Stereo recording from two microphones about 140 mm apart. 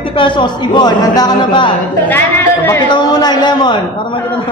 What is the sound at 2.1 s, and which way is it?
Speech, 15° left (ahead or behind).